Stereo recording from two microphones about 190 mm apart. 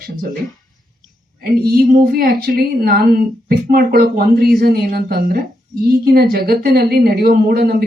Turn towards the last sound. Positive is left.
turn(degrees=-55)  # may be behind; listen again after turning